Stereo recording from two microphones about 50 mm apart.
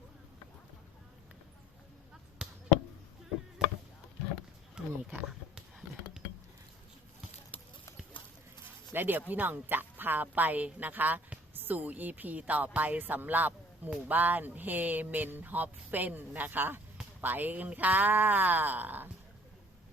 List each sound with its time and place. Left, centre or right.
2.4 s chop: centre
4.8 s a sound: centre
8.9 s speech: right